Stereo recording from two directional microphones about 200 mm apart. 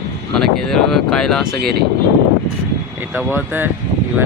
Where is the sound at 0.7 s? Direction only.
Centre (ahead or behind).